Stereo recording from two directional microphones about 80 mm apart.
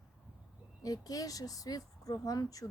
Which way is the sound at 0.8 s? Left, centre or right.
Left.